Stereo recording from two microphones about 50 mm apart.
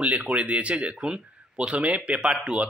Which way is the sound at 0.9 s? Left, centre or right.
Centre.